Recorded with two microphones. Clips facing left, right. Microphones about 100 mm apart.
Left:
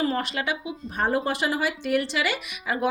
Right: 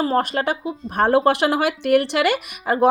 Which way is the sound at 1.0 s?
70° right (ahead or behind).